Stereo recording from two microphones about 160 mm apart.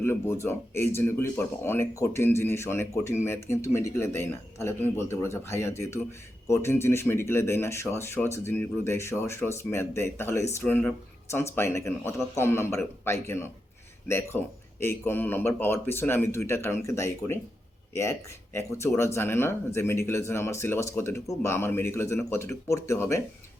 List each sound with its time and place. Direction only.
0.0 s speech: 15° left (ahead or behind)